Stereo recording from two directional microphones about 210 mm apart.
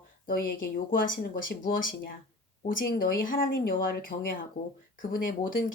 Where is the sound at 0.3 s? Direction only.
40° left (ahead or behind).